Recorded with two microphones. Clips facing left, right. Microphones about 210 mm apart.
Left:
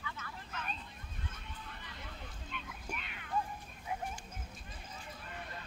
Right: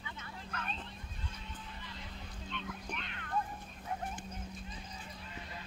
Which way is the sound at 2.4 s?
5° left (ahead or behind).